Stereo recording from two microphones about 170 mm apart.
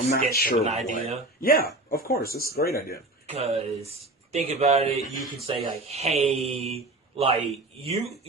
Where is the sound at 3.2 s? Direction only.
35° right (ahead or behind).